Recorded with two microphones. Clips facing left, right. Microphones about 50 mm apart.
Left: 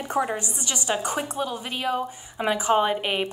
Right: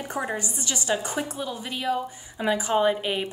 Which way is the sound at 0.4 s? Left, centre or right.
Left.